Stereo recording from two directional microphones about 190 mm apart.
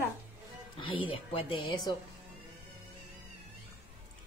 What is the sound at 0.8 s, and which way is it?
Speech, 25° left (ahead or behind).